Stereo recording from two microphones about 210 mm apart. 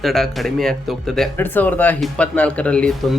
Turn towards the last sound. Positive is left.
turn(degrees=5)  # may be behind; listen again after turning